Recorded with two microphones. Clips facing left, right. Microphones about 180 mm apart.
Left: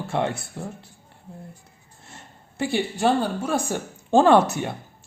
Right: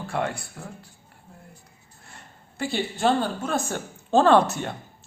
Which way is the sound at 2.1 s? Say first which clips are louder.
Left 3 dB; 25° left (ahead or behind).